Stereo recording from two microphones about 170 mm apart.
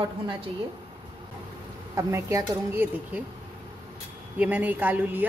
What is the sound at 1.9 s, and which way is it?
A woman's voice, 20° right (ahead or behind).